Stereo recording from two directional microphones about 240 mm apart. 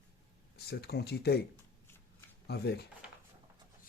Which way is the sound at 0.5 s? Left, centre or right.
Left.